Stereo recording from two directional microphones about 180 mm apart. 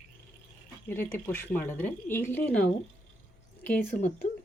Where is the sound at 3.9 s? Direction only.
45° left (ahead or behind).